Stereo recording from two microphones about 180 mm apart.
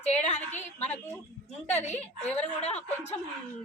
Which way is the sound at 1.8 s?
40° left (ahead or behind).